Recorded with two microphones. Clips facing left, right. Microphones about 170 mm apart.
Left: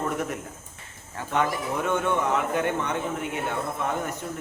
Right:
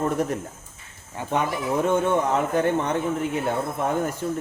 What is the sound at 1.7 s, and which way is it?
Speech, 35° right (ahead or behind).